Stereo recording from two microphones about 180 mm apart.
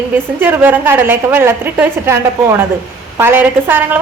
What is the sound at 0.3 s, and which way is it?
A woman's voice, 10° right (ahead or behind).